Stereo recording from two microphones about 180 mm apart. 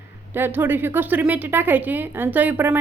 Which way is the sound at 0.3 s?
10° right (ahead or behind).